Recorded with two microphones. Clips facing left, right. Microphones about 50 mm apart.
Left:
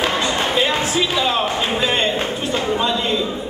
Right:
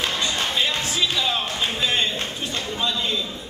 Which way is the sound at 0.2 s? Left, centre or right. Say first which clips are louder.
Left 5 dB; left.